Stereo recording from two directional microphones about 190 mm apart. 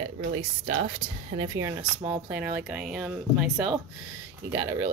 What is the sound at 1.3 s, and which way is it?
Speech, 20° right (ahead or behind).